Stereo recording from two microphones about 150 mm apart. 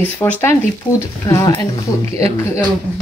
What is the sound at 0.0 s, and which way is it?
Speech, 15° left (ahead or behind).